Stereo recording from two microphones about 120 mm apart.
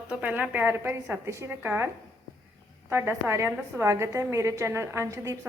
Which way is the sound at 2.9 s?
25° right (ahead or behind).